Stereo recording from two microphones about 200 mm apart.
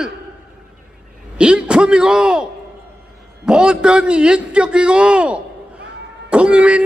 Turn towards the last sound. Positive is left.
turn(degrees=-5)  # may be behind; listen again after turning